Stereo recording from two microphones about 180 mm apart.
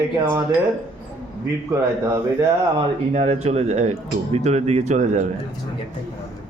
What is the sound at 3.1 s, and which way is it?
Speech, 35° right (ahead or behind).